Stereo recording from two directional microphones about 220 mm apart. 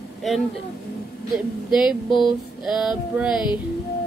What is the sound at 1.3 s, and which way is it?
A woman's voice, 5° right (ahead or behind).